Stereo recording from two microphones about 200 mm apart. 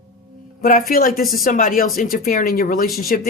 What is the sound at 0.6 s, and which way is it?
Speech, 45° left (ahead or behind).